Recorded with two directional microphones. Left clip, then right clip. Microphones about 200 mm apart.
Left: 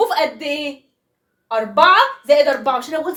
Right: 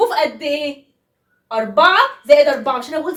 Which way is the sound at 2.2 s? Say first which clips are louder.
Right 2 dB; 35° left (ahead or behind).